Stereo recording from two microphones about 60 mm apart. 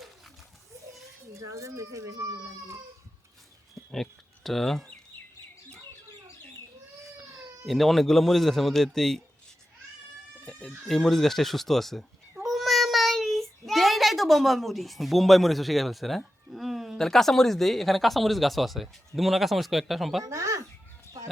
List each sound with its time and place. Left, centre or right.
1.3 s a child's voice: right
3.9 s speech: centre
7.0 s baby cry: centre
7.7 s a man's voice: centre
10.6 s speech: centre
20.2 s speech: right